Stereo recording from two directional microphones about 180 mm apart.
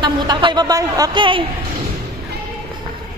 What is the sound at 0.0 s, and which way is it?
A woman's voice, 25° right (ahead or behind).